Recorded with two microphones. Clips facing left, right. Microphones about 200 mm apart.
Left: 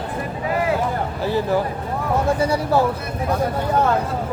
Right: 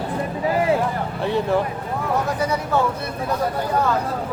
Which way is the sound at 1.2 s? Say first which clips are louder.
Even; centre (ahead or behind).